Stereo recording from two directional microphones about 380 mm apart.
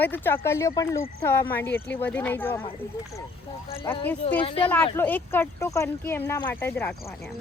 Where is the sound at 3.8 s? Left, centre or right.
Centre.